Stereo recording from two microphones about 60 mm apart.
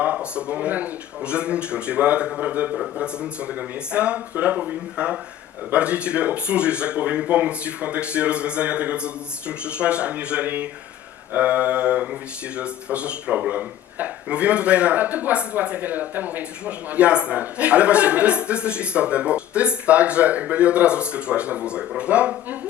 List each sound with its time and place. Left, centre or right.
0.0 s speech: right